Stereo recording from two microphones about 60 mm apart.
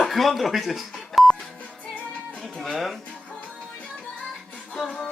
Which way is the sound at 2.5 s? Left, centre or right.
Centre.